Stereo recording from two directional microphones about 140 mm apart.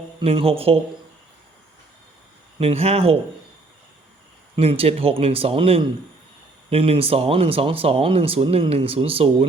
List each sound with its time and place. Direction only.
0.2 s speech: 40° right (ahead or behind)
2.6 s speech: 45° right (ahead or behind)
4.5 s speech: 40° right (ahead or behind)